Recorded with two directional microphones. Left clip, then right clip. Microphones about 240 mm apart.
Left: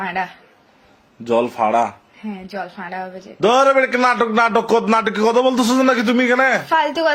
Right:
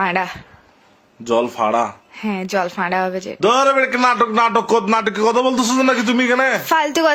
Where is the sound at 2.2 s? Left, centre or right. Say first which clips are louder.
Right 8 dB; right.